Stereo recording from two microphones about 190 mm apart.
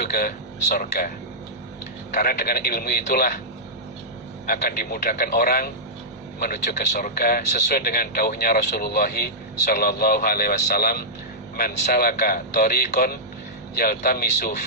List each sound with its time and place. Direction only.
0.0 s speech: 55° left (ahead or behind)
2.1 s a man's voice: 50° left (ahead or behind)
4.4 s speech: 55° left (ahead or behind)